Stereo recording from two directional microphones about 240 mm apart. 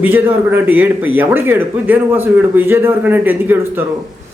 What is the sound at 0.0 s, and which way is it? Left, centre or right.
Speech, centre.